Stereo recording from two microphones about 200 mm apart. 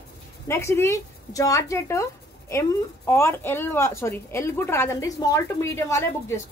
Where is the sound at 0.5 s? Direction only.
15° left (ahead or behind).